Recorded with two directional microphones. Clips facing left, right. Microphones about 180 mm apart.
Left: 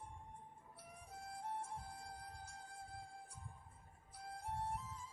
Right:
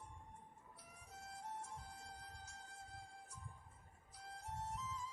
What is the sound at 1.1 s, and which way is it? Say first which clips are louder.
Music: left 4 dB; 55° left (ahead or behind).